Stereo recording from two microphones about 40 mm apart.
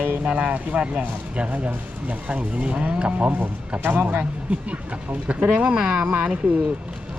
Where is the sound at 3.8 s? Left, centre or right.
Right.